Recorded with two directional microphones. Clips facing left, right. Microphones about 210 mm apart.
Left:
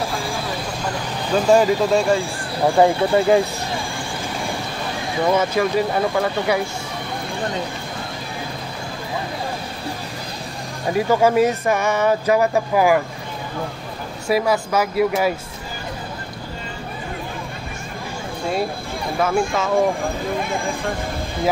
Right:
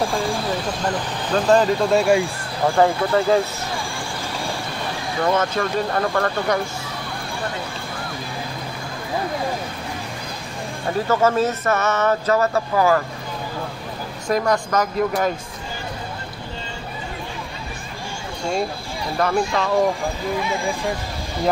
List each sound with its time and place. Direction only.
1.3 s speech: 10° left (ahead or behind)
3.1 s speech: 15° left (ahead or behind)
5.2 s speech: 10° left (ahead or behind)
10.9 s speech: 15° left (ahead or behind)
14.2 s speech: 5° left (ahead or behind)
19.1 s speech: 5° left (ahead or behind)